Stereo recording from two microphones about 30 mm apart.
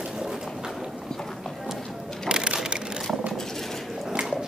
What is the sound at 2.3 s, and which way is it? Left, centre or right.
Crushing, right.